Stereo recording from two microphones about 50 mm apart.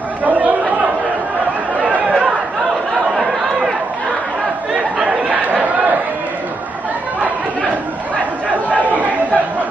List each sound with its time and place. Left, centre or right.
0.2 s chatter: right
1.9 s chatter: right
5.3 s chatter: right
8.6 s chatter: right